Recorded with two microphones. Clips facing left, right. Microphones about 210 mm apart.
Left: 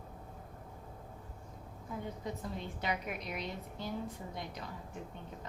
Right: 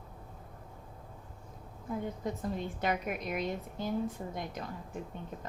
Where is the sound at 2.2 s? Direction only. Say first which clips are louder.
Right 5 dB; 50° right (ahead or behind).